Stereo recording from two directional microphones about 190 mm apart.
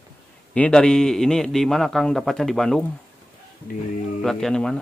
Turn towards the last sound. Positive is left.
turn(degrees=5)  # may be behind; listen again after turning